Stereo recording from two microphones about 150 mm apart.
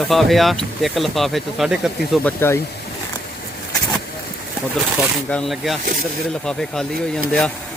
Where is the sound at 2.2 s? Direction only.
15° left (ahead or behind).